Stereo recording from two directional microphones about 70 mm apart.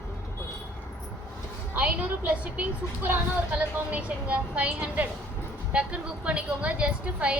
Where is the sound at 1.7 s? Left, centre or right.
Right.